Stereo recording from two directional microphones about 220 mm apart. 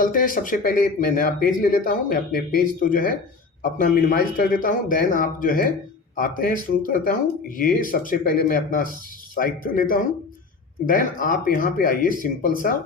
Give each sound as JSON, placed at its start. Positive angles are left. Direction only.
{"t": 0.0, "sound": "speech", "side_deg": 40}